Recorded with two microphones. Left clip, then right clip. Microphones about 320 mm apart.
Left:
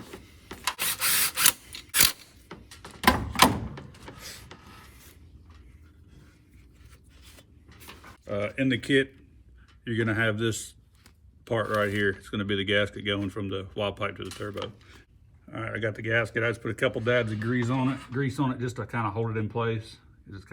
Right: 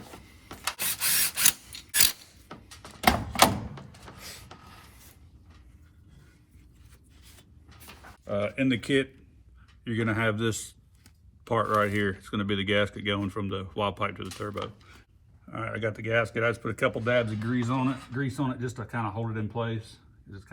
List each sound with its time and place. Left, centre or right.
0.2 s rub: centre
0.8 s rub: centre
3.0 s a sound: centre
8.4 s speech: centre
15.5 s speech: centre